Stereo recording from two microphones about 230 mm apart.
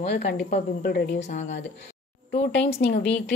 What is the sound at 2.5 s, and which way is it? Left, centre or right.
Speech, left.